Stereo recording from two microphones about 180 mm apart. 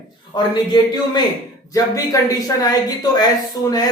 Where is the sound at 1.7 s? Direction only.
20° left (ahead or behind).